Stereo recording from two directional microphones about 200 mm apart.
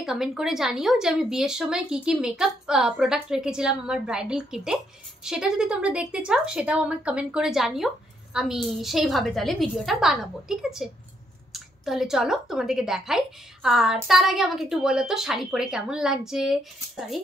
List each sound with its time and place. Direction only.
0.0 s speech: centre (ahead or behind)